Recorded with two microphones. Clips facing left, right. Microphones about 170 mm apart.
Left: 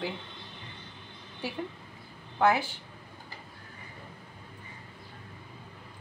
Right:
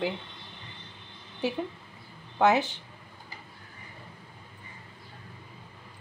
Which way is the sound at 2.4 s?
20° right (ahead or behind).